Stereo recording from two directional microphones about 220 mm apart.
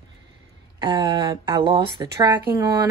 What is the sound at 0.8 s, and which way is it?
Speech, 20° right (ahead or behind).